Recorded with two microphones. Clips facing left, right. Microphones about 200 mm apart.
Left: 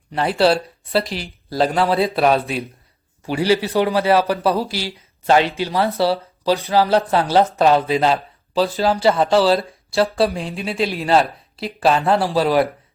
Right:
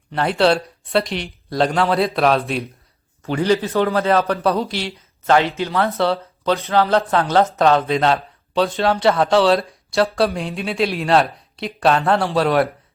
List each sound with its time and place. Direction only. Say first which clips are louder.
0.1 s a man's voice: even; 5° left (ahead or behind)
5.2 s a man's voice: even; 15° left (ahead or behind)
6.0 s a man's voice: left 1 dB; 5° left (ahead or behind)